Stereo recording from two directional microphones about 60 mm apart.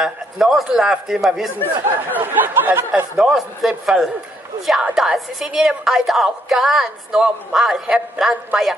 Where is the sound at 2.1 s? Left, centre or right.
Right.